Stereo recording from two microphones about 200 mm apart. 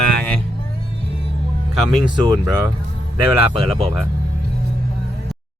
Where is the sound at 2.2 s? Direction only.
20° right (ahead or behind).